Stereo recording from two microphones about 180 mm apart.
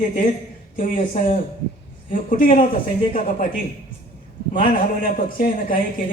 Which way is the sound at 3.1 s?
45° left (ahead or behind).